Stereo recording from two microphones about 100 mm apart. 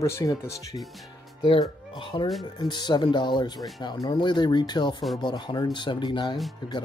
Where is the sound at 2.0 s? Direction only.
55° left (ahead or behind).